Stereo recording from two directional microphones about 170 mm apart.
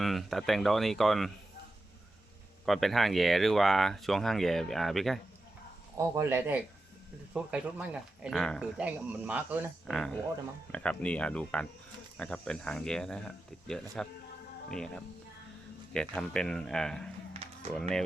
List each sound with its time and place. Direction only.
0.0 s speech: centre (ahead or behind)
2.6 s speech: centre (ahead or behind)
6.0 s speech: 15° right (ahead or behind)
8.4 s speech: 5° left (ahead or behind)
8.8 s speech: 10° right (ahead or behind)
9.8 s speech: 5° left (ahead or behind)
17.3 s run: 35° right (ahead or behind)